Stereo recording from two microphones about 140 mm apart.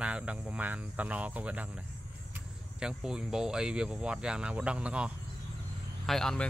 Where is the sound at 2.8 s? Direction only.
5° right (ahead or behind).